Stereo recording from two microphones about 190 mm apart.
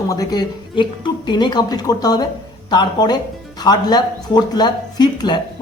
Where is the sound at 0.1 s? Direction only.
20° left (ahead or behind).